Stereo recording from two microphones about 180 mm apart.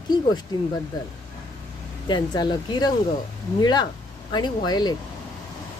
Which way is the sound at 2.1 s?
25° left (ahead or behind).